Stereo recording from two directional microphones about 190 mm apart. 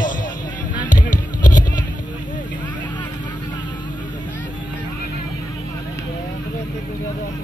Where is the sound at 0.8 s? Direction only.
45° left (ahead or behind).